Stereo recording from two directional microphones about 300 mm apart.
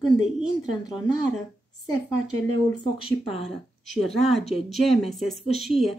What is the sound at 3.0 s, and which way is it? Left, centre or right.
Speech, centre.